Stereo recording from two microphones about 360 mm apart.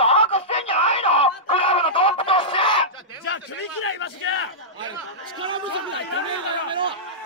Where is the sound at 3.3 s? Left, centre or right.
Left.